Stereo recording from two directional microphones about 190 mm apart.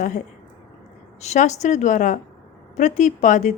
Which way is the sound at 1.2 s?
35° left (ahead or behind).